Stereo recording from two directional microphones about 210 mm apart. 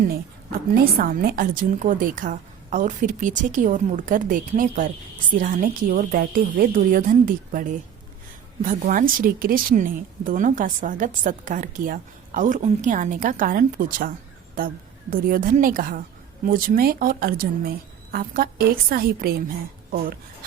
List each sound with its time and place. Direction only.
0.7 s speech: 45° right (ahead or behind)
15.1 s a woman's voice: 40° right (ahead or behind)